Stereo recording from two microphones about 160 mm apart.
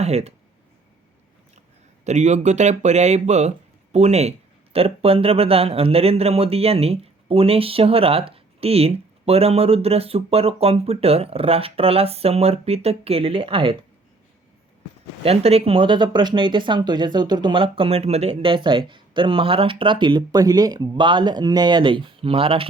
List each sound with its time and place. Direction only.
0.0 s speech: 40° right (ahead or behind)
2.0 s speech: 45° right (ahead or behind)
15.2 s speech: 40° right (ahead or behind)